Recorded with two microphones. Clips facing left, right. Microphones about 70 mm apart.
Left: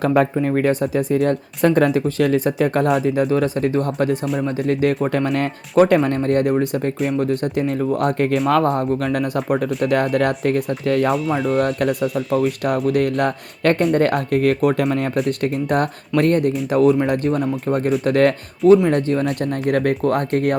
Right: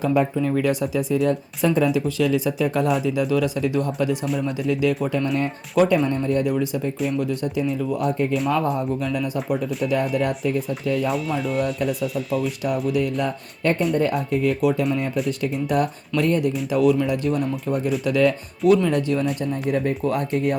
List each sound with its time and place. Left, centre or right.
0.0 s speech: left
0.3 s speech: left
5.1 s speech: left
11.1 s speech: centre
11.6 s speech: left
11.9 s speech: centre
12.3 s speech: left
20.1 s speech: left